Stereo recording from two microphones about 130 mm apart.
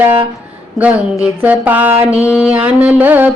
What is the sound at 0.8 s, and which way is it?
Speech, centre (ahead or behind).